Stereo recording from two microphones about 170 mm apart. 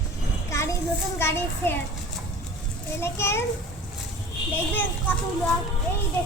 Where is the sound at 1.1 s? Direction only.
15° left (ahead or behind).